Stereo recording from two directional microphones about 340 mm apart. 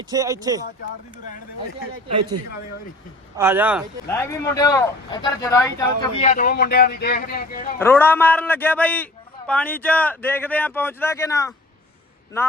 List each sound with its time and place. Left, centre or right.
0.1 s speech: centre
3.3 s speech: centre
4.1 s speech: centre; by 7.8 s left
7.8 s speech: centre